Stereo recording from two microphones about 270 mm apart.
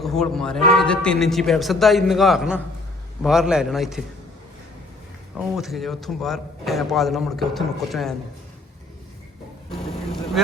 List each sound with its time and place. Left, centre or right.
0.0 s a man's voice: centre
5.4 s a man's voice: centre
9.7 s speech: left
10.4 s a man's voice: centre